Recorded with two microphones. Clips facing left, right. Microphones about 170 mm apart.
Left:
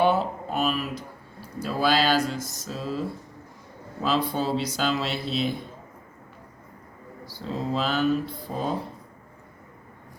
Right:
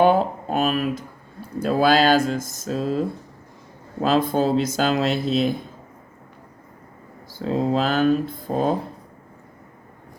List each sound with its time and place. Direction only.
0.0 s a sound: 50° right (ahead or behind)
1.5 s speech: 50° right (ahead or behind)
7.3 s speech: 50° right (ahead or behind)